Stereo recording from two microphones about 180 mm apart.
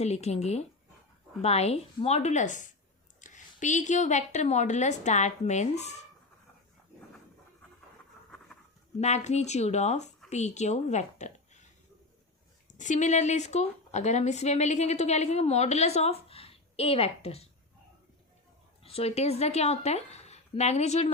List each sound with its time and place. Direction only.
0.0 s speech: 35° left (ahead or behind)
9.0 s a woman's voice: 40° left (ahead or behind)
12.7 s speech: 45° left (ahead or behind)
18.8 s speech: 30° left (ahead or behind)